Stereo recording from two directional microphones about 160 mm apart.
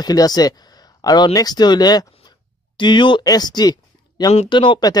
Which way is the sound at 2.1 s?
30° left (ahead or behind).